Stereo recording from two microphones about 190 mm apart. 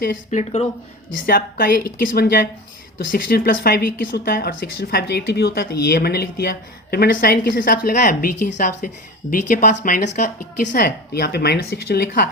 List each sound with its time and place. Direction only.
0.3 s speech: 35° left (ahead or behind)
1.3 s a woman's voice: 50° left (ahead or behind)